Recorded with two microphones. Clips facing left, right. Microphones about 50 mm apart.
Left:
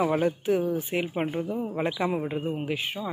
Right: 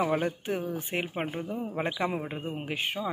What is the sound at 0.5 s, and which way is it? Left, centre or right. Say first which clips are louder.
Speech: left 7 dB; right.